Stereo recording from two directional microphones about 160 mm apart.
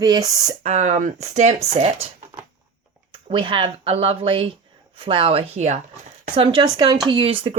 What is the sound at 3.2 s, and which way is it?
Speech, 30° right (ahead or behind).